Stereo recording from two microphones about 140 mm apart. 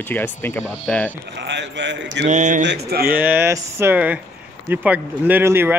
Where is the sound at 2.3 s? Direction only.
65° right (ahead or behind).